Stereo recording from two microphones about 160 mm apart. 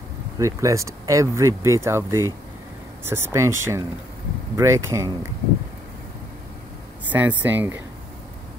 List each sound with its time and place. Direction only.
0.4 s speech: 20° right (ahead or behind)
7.1 s speech: 10° right (ahead or behind)